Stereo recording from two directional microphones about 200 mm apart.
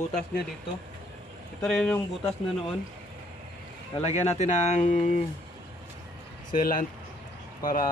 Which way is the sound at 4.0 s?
35° left (ahead or behind).